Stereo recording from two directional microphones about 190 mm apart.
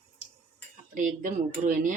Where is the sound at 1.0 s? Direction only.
45° right (ahead or behind).